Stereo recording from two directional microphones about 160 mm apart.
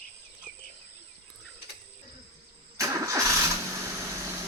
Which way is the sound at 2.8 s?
20° right (ahead or behind).